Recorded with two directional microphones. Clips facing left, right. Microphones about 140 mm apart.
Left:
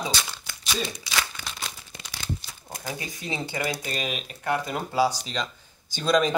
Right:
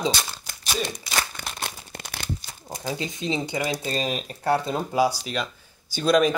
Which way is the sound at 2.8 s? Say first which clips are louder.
Right 6 dB; 20° right (ahead or behind).